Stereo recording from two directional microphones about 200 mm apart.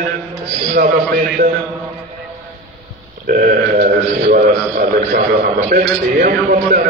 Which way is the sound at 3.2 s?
45° right (ahead or behind).